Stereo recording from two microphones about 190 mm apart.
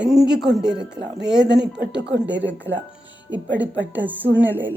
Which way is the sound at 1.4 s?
65° right (ahead or behind).